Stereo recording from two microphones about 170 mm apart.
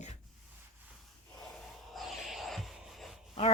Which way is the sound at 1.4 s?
Centre (ahead or behind).